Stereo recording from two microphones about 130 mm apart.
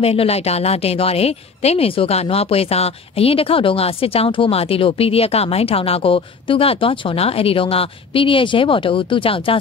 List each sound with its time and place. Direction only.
0.0 s speech: 50° left (ahead or behind)